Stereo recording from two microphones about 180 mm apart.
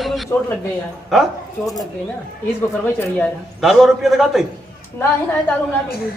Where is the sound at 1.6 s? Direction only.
20° left (ahead or behind).